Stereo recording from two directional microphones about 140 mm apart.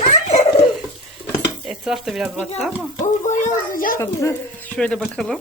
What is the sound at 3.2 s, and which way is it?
Speech, 60° left (ahead or behind).